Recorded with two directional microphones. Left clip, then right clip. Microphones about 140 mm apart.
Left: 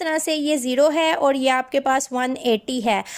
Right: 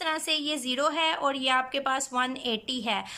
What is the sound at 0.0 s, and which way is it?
A woman's voice, 50° left (ahead or behind).